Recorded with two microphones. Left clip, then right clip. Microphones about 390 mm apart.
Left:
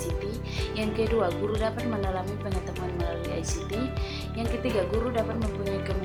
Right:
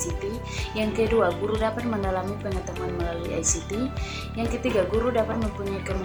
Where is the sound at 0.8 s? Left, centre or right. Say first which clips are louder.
Right 4 dB; left.